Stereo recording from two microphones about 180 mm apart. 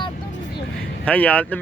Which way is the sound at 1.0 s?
10° left (ahead or behind).